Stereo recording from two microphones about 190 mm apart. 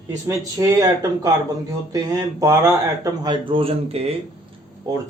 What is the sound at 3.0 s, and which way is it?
Speech, 25° right (ahead or behind).